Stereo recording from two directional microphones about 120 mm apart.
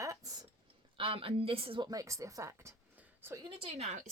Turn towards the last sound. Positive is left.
turn(degrees=-50)  # may be behind; listen again after turning